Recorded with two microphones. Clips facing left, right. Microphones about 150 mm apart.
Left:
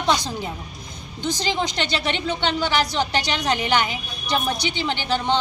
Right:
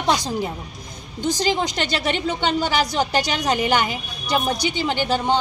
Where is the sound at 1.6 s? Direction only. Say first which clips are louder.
Right 1 dB; 40° right (ahead or behind).